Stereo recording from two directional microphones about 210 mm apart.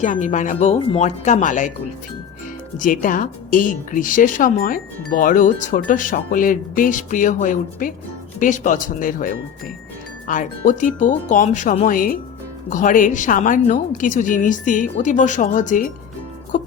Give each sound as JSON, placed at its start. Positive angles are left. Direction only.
{"t": 0.0, "sound": "speech", "side_deg": 35}
{"t": 2.7, "sound": "speech", "side_deg": 40}